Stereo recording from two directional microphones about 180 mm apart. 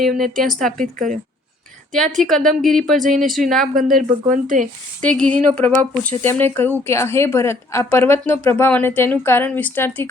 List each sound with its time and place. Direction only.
0.0 s a woman's voice: centre (ahead or behind)
0.8 s speech: 45° right (ahead or behind)
1.9 s a woman's voice: centre (ahead or behind)
3.8 s speech: 50° right (ahead or behind)
5.0 s a woman's voice: 5° left (ahead or behind)